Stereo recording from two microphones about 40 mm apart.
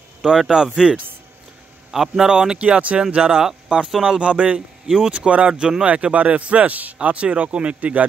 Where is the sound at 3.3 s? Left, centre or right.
Centre.